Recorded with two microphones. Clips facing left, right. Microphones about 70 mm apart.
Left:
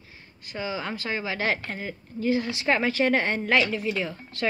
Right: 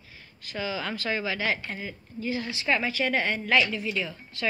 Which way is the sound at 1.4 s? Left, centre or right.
Left.